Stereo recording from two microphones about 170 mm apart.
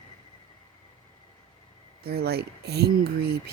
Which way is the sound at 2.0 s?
65° right (ahead or behind).